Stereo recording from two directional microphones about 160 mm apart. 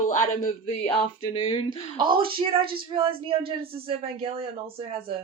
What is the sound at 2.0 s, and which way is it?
Speech, 30° right (ahead or behind).